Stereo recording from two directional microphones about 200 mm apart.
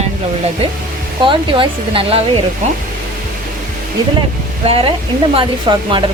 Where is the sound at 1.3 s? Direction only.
25° right (ahead or behind).